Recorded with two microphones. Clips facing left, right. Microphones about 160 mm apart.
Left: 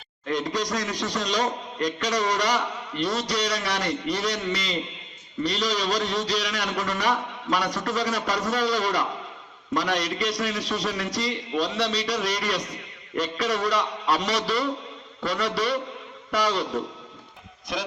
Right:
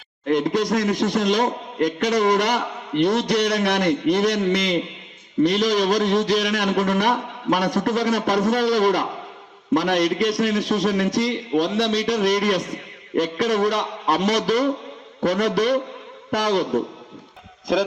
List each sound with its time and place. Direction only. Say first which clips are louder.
0.3 s a man's voice: right 7 dB; 55° right (ahead or behind)